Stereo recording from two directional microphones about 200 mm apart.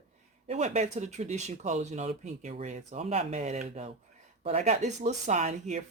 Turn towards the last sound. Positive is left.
turn(degrees=-35)  # may be behind; listen again after turning